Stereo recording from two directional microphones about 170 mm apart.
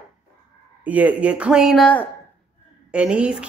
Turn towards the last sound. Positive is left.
turn(degrees=-5)  # may be behind; listen again after turning